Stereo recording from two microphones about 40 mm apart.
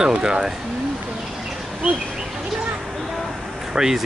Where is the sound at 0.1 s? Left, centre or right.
Right.